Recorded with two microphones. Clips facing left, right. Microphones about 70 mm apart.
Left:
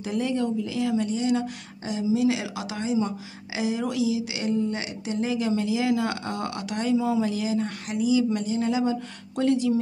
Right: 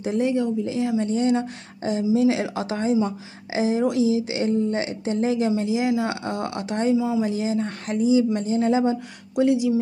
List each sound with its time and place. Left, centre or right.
0.0 s speech: right
1.1 s a woman's voice: right
5.6 s speech: right
7.0 s speech: centre
7.2 s a woman's voice: right
9.3 s speech: centre